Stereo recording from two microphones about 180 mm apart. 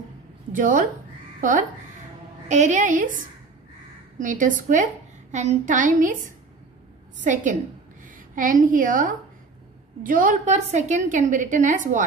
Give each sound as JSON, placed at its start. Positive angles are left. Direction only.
{"t": 0.5, "sound": "a woman's voice", "side_deg": -45}
{"t": 4.2, "sound": "a woman's voice", "side_deg": -45}